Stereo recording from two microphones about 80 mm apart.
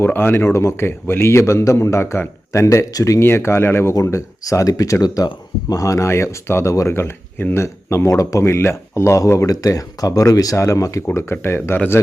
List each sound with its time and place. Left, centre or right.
0.0 s speech: left